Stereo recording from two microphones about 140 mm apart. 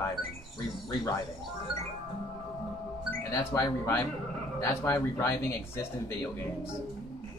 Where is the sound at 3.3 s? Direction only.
20° left (ahead or behind).